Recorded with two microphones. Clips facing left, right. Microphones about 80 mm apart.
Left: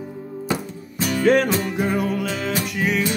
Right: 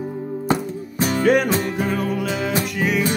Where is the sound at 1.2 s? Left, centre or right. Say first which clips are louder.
Even; centre.